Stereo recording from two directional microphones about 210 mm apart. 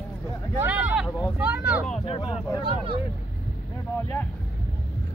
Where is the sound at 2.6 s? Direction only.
25° right (ahead or behind).